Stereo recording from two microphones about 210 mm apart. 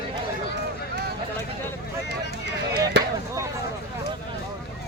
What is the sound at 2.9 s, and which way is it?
Chop, 55° right (ahead or behind).